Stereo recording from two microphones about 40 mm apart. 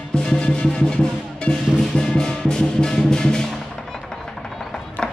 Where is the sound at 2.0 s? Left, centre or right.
Centre.